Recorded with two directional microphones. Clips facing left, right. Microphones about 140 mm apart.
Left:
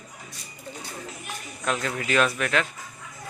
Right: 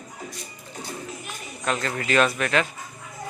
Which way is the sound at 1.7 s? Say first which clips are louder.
Right 1 dB; centre (ahead or behind).